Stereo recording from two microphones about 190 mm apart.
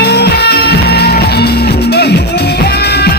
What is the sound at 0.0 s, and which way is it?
Music, 55° left (ahead or behind).